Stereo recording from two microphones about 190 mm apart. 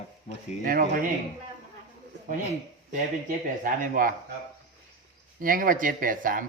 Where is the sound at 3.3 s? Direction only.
45° right (ahead or behind).